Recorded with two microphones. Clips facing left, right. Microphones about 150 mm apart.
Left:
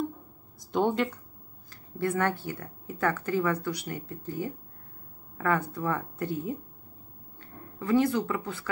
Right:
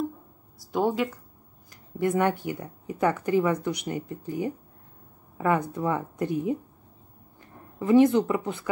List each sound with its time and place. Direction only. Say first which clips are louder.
0.6 s speech: right 1 dB; 5° right (ahead or behind)
1.7 s speech: right 4 dB; 15° right (ahead or behind)
5.7 s speech: right 3 dB; 20° right (ahead or behind)